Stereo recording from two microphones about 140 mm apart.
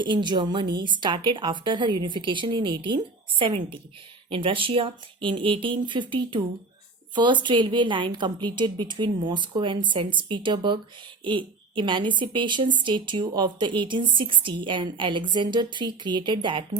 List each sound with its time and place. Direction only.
0.0 s a woman's voice: 35° right (ahead or behind)